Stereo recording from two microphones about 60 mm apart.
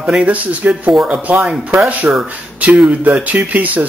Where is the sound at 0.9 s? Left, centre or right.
Centre.